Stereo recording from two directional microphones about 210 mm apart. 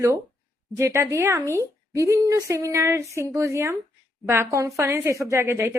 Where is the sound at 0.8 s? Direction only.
15° right (ahead or behind).